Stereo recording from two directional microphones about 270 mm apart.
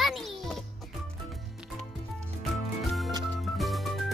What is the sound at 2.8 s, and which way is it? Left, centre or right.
Music, centre.